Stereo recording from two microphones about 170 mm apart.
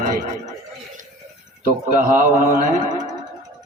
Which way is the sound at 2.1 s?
50° right (ahead or behind).